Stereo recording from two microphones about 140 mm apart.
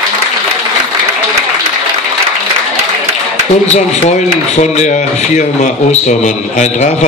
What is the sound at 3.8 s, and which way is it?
A man's voice, 60° left (ahead or behind).